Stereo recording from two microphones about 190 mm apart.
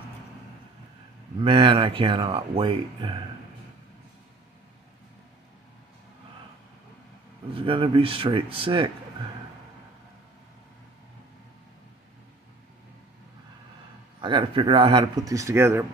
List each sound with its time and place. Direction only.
1.4 s speech: 25° right (ahead or behind)
7.5 s speech: 30° right (ahead or behind)
14.2 s speech: 25° right (ahead or behind)